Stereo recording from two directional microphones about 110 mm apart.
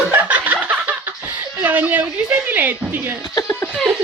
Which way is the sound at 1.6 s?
15° right (ahead or behind).